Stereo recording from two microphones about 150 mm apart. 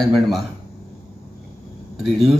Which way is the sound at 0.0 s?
Centre (ahead or behind).